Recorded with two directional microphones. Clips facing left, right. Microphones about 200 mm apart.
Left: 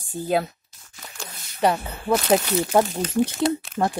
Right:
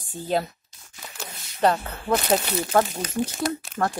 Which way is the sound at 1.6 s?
10° left (ahead or behind).